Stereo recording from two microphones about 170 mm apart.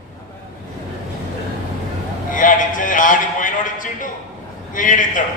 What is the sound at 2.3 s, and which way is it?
A man's voice, 50° left (ahead or behind).